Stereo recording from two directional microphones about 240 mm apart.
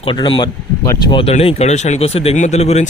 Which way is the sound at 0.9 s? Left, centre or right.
Left.